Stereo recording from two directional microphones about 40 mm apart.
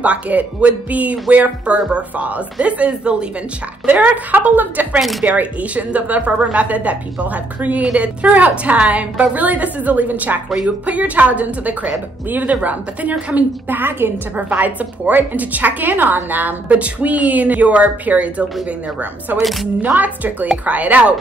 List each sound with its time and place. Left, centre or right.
0.0 s a woman's voice: right
4.3 s a woman's voice: right
5.2 s a woman's voice: right
8.7 s speech: right
9.3 s a woman's voice: right
13.7 s a woman's voice: right
14.6 s a woman's voice: right
16.7 s a woman's voice: right
19.8 s a woman's voice: right